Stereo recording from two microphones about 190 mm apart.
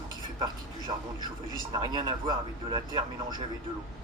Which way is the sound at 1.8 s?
20° right (ahead or behind).